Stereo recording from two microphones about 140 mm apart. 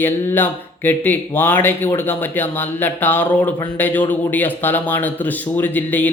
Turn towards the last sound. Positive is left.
turn(degrees=10)  # may be behind; listen again after turning